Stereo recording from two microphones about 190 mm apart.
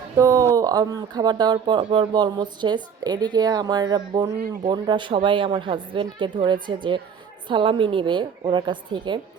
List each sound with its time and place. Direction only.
0.2 s speech: 15° right (ahead or behind)